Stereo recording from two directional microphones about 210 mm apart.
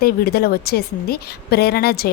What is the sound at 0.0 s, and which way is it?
A woman's voice, 45° left (ahead or behind).